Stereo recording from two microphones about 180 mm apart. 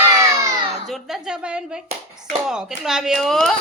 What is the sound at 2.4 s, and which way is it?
A woman's voice, 5° right (ahead or behind).